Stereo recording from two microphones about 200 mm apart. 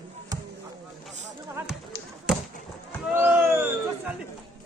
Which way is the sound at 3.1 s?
10° right (ahead or behind).